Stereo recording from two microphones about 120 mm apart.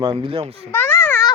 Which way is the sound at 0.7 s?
15° left (ahead or behind).